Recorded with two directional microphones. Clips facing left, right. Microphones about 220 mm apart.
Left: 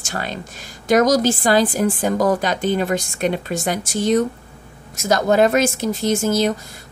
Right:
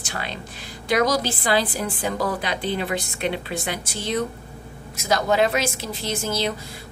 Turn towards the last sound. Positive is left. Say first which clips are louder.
# left 8 dB
turn(degrees=45)  # may be behind; listen again after turning